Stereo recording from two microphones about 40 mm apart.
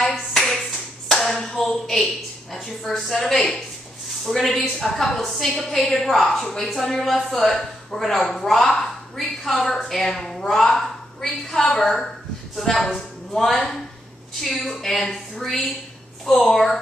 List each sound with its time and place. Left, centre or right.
0.3 s clapping: centre
2.5 s a woman's voice: centre
15.3 s a woman's voice: centre